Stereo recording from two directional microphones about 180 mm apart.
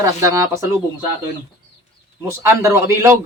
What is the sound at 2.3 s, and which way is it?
Speech, 15° right (ahead or behind).